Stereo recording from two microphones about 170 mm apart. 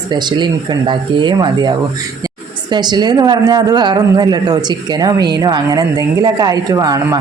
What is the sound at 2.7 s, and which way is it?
A man's voice, 25° right (ahead or behind).